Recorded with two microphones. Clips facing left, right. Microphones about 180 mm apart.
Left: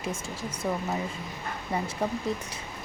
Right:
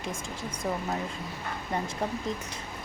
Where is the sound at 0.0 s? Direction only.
5° left (ahead or behind).